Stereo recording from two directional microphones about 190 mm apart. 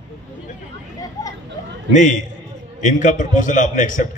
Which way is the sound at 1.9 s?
40° left (ahead or behind).